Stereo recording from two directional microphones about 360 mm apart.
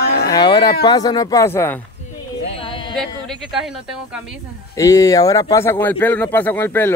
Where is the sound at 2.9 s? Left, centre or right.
Centre.